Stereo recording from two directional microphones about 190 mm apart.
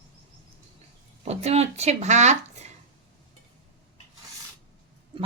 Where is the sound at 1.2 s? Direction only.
35° right (ahead or behind).